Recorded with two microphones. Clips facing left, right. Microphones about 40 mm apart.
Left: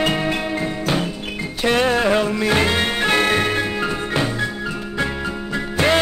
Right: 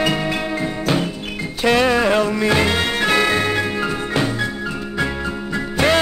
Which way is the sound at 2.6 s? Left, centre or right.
Left.